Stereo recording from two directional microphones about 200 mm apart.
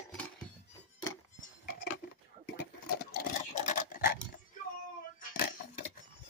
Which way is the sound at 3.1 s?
40° left (ahead or behind).